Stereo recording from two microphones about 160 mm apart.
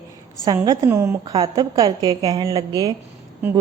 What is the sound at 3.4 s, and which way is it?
Speech, 15° right (ahead or behind).